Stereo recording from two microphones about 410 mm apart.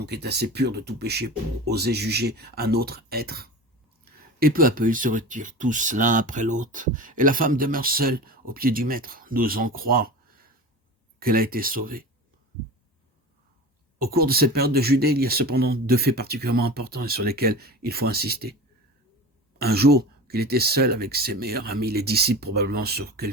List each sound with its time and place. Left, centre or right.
0.0 s speech: right
14.0 s speech: right
19.5 s speech: right